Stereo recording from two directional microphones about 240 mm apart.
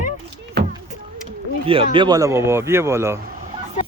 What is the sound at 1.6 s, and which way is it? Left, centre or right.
Speech, right.